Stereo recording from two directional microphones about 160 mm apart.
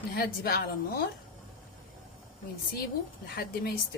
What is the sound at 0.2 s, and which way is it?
Speech, 70° left (ahead or behind).